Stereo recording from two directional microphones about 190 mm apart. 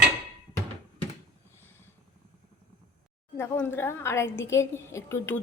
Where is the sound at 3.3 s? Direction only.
10° left (ahead or behind).